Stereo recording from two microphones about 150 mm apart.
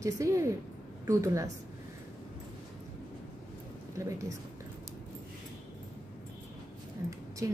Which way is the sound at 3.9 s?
20° right (ahead or behind).